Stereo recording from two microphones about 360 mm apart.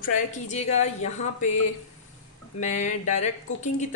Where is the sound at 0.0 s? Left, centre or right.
Left.